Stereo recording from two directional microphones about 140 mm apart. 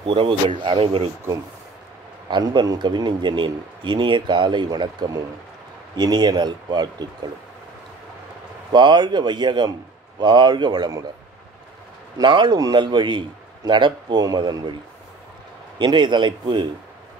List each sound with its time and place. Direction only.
0.0 s a man's voice: 40° right (ahead or behind)
2.2 s a man's voice: 35° right (ahead or behind)
8.7 s a man's voice: 35° right (ahead or behind)
12.2 s a man's voice: 30° right (ahead or behind)
15.8 s a man's voice: 35° right (ahead or behind)